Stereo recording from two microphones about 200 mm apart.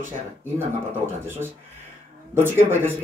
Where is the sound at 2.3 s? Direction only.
10° right (ahead or behind).